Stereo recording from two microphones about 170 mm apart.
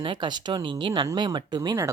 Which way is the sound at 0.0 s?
30° right (ahead or behind).